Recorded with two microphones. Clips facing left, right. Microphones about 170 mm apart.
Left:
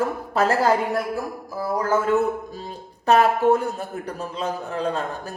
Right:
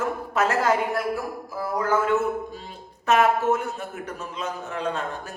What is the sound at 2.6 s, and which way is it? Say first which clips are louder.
A woman's voice: left 5 dB; 35° left (ahead or behind).